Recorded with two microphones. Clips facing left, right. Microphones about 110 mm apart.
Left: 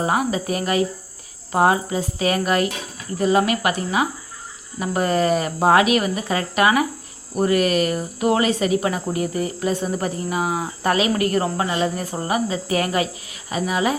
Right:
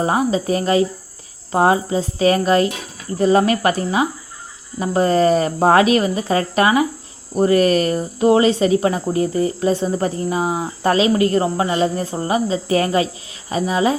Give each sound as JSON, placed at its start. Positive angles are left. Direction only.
{"t": 0.0, "sound": "a woman's voice", "side_deg": -30}